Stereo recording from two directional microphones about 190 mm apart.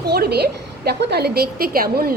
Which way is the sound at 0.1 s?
60° right (ahead or behind).